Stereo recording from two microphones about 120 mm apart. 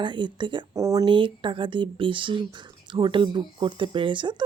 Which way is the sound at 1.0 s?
45° right (ahead or behind).